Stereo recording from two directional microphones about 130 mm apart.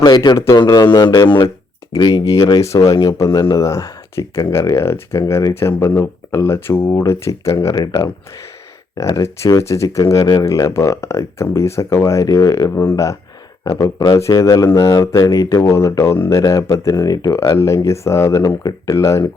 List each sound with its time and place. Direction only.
0.0 s speech: 35° left (ahead or behind)
0.6 s speech: 35° left (ahead or behind)